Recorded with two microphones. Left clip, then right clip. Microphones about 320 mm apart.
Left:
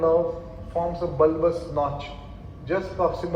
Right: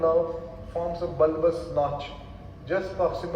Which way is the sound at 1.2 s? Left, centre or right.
Left.